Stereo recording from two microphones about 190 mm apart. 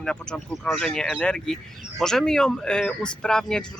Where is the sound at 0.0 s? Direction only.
5° left (ahead or behind).